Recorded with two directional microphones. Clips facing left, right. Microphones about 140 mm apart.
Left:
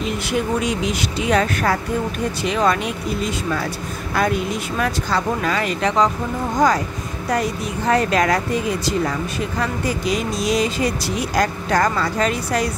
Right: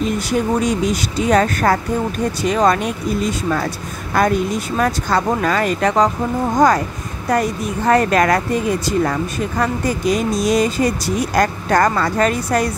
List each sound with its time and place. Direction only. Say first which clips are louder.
0.0 s speech: right 3 dB; 40° right (ahead or behind)
4.1 s speech: right 4 dB; 50° right (ahead or behind)
7.2 s speech: right 4 dB; 50° right (ahead or behind)
9.6 s speech: right 4 dB; 45° right (ahead or behind)